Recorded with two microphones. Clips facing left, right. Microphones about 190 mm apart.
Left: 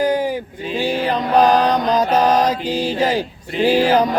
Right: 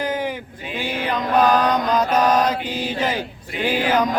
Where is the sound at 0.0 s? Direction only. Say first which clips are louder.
Left 6 dB; 35° left (ahead or behind).